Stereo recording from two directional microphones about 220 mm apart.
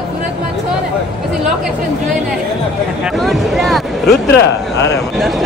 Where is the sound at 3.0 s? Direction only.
Centre (ahead or behind).